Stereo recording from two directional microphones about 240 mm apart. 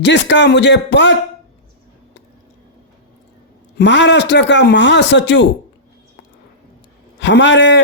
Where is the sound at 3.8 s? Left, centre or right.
Left.